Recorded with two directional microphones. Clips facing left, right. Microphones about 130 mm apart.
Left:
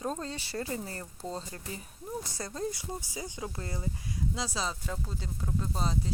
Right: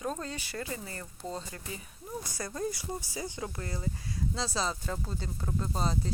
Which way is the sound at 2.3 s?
25° left (ahead or behind).